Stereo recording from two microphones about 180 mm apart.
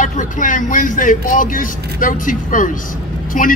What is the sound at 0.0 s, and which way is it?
Speech, 45° left (ahead or behind).